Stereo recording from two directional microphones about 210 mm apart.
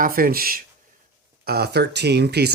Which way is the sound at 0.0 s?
45° right (ahead or behind).